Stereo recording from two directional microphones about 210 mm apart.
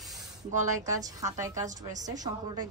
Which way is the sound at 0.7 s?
15° right (ahead or behind).